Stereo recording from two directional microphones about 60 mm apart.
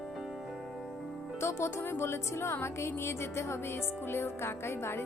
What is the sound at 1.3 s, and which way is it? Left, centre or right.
Speech, left.